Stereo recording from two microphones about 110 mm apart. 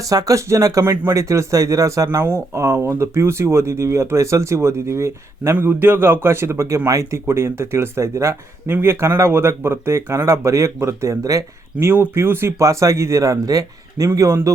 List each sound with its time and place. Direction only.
0.1 s speech: 30° right (ahead or behind)